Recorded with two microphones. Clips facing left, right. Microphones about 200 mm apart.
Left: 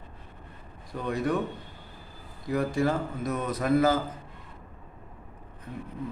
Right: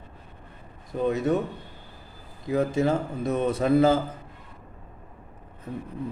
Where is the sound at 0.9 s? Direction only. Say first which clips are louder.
Right 5 dB; 20° right (ahead or behind).